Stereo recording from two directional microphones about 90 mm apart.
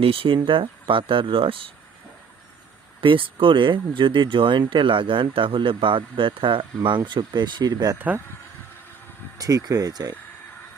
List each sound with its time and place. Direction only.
0.0 s speech: 90° right
0.4 s speech: 75° right (ahead or behind)
3.0 s speech: 70° right (ahead or behind); by 7.9 s 50° right (ahead or behind)
7.9 s speech: 20° right (ahead or behind)
9.4 s speech: 40° right (ahead or behind)